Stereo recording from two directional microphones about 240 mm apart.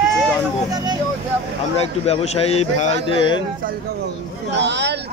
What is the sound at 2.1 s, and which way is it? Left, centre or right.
A man's voice, left.